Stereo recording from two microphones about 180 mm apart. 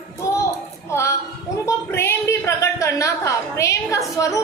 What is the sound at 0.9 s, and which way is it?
A woman's voice, 15° left (ahead or behind).